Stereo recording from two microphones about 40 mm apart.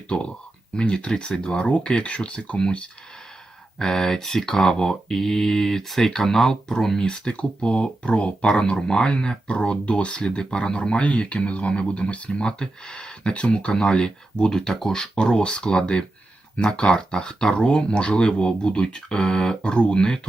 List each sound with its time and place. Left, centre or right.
0.8 s speech: left
3.8 s speech: centre
7.0 s speech: left